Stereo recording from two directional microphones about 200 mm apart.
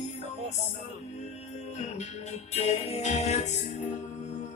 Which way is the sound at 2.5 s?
30° left (ahead or behind).